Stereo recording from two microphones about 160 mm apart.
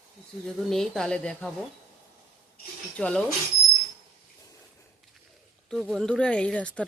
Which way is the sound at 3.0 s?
5° left (ahead or behind).